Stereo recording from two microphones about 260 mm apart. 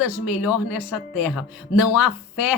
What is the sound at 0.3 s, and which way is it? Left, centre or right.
Speech, centre.